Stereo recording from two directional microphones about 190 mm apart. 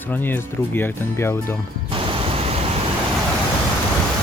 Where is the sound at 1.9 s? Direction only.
30° right (ahead or behind).